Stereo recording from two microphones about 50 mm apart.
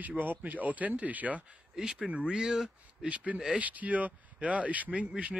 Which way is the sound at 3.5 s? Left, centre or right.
Right.